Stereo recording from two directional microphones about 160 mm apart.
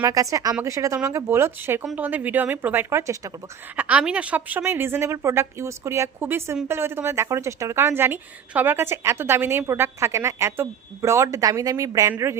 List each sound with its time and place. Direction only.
0.0 s speech: 20° right (ahead or behind)